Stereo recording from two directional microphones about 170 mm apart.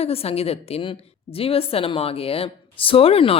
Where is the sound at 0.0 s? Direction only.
35° left (ahead or behind).